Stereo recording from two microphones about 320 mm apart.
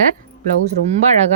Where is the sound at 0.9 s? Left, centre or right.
Right.